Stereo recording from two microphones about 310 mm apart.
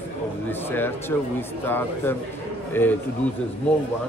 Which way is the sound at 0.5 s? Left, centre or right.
Centre.